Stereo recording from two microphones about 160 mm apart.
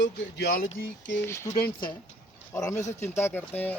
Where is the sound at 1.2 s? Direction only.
15° left (ahead or behind).